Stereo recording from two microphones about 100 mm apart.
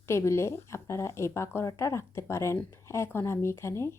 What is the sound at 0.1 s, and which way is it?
Speech, 30° left (ahead or behind).